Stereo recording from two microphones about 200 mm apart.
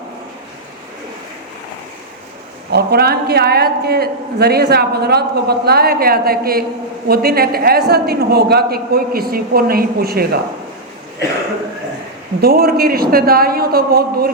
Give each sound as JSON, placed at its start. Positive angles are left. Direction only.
{"t": 2.7, "sound": "a man's voice", "side_deg": -50}
{"t": 12.4, "sound": "a man's voice", "side_deg": -50}